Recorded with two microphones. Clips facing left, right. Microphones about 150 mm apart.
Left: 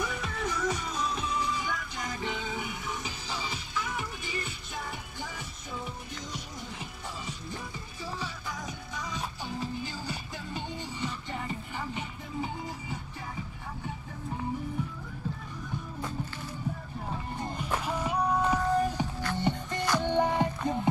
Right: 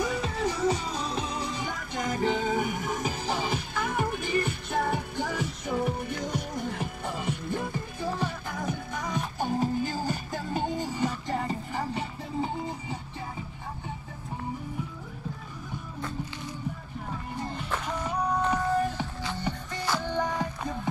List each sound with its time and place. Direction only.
0.0 s music: 30° right (ahead or behind)
17.6 s music: 10° left (ahead or behind)
19.3 s music: 20° left (ahead or behind)